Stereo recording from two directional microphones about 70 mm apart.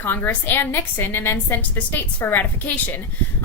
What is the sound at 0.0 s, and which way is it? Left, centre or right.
A woman's voice, left.